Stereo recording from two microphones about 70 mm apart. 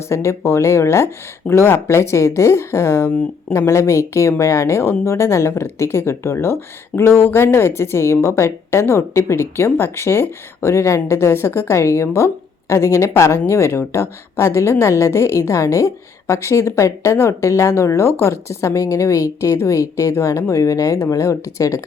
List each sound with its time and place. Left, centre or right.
0.1 s a woman's voice: left